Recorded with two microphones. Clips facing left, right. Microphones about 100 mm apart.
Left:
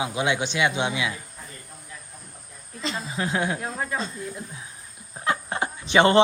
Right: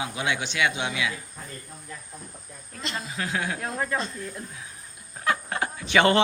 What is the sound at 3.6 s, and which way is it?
Speech, 15° left (ahead or behind).